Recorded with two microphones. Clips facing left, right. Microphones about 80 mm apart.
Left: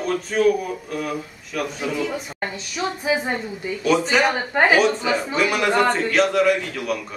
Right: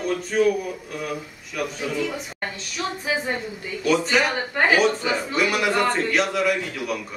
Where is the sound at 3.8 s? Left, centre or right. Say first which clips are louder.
Left 2 dB; centre.